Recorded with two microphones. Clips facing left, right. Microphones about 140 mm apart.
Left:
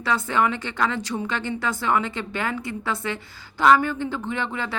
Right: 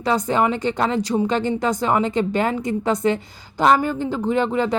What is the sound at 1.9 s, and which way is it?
Speech, 40° right (ahead or behind).